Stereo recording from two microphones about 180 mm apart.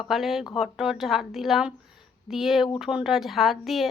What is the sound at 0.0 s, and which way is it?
A woman's voice, centre (ahead or behind).